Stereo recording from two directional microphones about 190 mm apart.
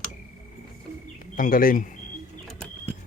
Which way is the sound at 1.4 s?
45° left (ahead or behind).